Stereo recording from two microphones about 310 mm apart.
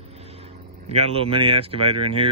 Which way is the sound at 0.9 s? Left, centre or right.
Centre.